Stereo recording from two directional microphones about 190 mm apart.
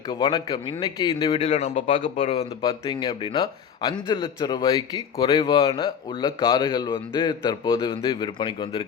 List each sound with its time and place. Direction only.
0.1 s speech: 25° left (ahead or behind)